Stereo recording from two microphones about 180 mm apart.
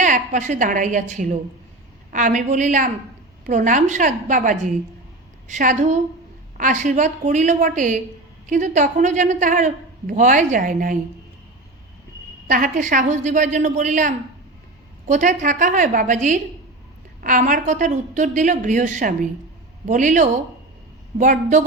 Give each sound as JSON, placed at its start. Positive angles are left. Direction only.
{"t": 0.0, "sound": "a woman's voice", "side_deg": -45}
{"t": 12.5, "sound": "a woman's voice", "side_deg": -45}